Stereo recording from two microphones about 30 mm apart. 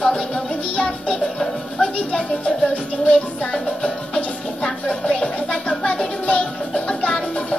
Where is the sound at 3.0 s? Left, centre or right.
Left.